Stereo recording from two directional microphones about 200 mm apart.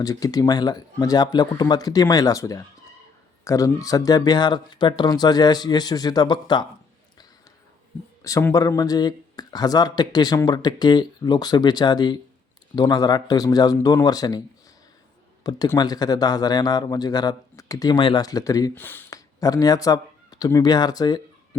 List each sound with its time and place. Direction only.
0.0 s a man's voice: 20° left (ahead or behind)
8.2 s a man's voice: 15° left (ahead or behind)
15.4 s a man's voice: 20° left (ahead or behind)